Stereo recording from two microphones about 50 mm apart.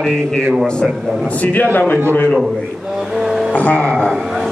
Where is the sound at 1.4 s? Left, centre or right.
Left.